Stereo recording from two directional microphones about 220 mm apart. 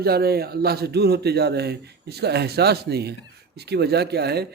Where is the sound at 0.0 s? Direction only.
45° right (ahead or behind).